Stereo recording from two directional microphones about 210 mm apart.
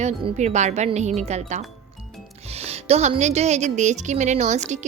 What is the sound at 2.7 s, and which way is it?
A woman's voice, 30° right (ahead or behind).